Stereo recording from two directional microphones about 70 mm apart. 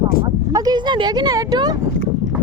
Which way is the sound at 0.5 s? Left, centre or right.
Right.